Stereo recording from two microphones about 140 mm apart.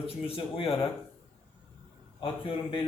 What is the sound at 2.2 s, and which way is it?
Speech, 40° left (ahead or behind).